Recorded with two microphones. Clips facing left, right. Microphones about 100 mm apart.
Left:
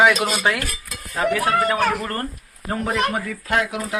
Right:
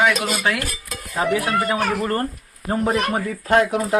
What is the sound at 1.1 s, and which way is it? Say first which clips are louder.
Speech: left 1 dB; 20° right (ahead or behind).